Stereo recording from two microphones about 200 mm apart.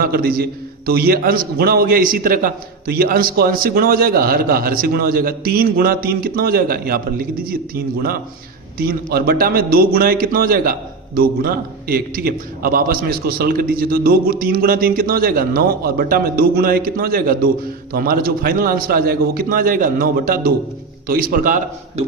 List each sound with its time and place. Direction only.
0.0 s a man's voice: 50° right (ahead or behind)
8.8 s a man's voice: 50° right (ahead or behind)